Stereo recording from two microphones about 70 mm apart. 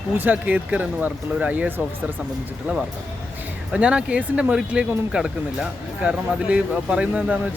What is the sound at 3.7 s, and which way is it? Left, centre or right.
Speech, centre.